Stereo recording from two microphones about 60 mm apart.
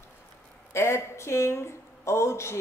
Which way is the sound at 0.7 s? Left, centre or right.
Left.